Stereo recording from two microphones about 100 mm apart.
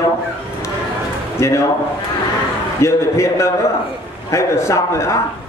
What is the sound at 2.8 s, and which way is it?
A man's voice, 30° left (ahead or behind).